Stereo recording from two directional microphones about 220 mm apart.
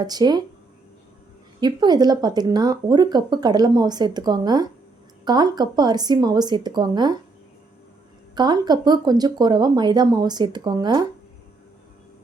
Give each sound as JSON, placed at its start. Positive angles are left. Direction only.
{"t": 0.0, "sound": "speech", "side_deg": -20}
{"t": 1.6, "sound": "speech", "side_deg": -20}
{"t": 8.4, "sound": "speech", "side_deg": -20}